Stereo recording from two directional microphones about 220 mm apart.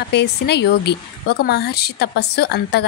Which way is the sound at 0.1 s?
50° left (ahead or behind).